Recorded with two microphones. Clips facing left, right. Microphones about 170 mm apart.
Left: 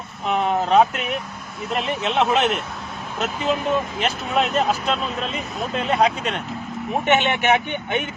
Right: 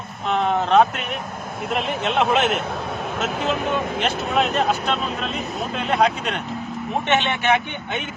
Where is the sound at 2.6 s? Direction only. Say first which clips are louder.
Right 6 dB; 60° right (ahead or behind).